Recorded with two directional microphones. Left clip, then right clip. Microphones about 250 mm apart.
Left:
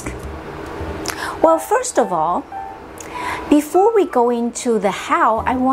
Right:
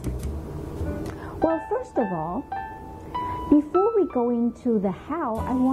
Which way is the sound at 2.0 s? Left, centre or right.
Left.